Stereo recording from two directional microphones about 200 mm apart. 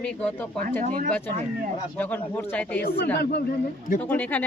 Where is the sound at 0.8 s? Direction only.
45° right (ahead or behind).